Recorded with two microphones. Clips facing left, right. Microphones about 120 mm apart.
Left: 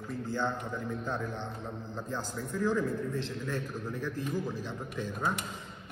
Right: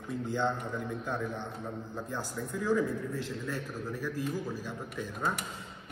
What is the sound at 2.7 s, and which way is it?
A man's voice, 5° right (ahead or behind).